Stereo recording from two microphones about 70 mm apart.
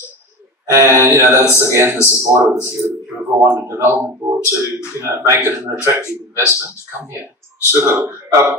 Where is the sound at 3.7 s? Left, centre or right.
Right.